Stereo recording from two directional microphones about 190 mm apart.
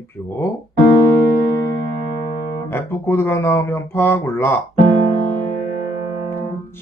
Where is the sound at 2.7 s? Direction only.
10° left (ahead or behind).